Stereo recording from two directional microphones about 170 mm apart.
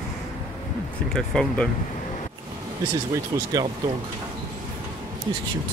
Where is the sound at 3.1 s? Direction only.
20° right (ahead or behind).